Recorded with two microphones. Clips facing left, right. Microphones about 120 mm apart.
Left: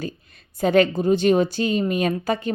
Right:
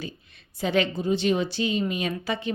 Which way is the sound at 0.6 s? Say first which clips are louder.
Left 7 dB; 50° left (ahead or behind).